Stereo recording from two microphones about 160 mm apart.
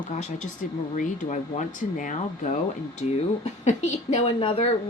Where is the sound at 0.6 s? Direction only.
55° left (ahead or behind).